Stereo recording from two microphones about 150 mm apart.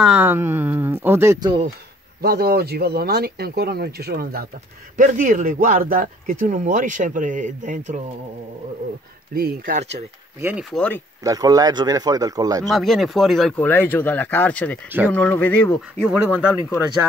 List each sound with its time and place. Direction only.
0.0 s speech: 10° right (ahead or behind)
2.2 s speech: 90° right
4.9 s speech: 60° right (ahead or behind)
9.3 s speech: 80° right
10.4 s speech: 10° right (ahead or behind)
10.7 s speech: 10° left (ahead or behind)
11.2 s speech: 25° right (ahead or behind)
12.6 s speech: centre (ahead or behind)
13.7 s speech: 15° left (ahead or behind)
16.1 s speech: 10° right (ahead or behind)